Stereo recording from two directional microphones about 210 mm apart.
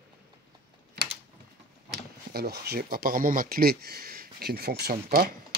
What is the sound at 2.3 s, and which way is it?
Speech, 50° right (ahead or behind).